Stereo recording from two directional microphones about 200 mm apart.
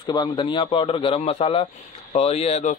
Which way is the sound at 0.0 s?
20° left (ahead or behind).